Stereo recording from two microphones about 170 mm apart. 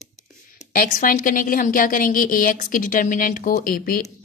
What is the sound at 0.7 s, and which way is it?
A woman's voice, 55° left (ahead or behind).